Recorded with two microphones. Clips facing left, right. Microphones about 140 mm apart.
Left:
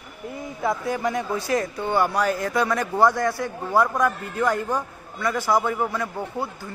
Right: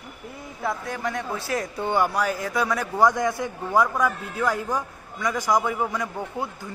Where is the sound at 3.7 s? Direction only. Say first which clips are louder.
Left 1 dB; 10° left (ahead or behind).